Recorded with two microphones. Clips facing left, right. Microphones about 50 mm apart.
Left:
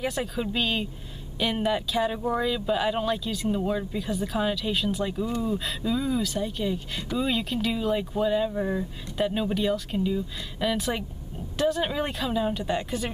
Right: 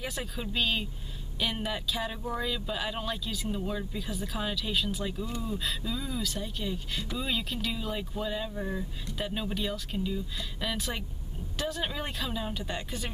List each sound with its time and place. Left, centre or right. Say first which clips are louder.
0.0 s speech: left 7 dB; centre
8.5 s speech: left 7 dB; centre
9.2 s speech: left 8 dB; centre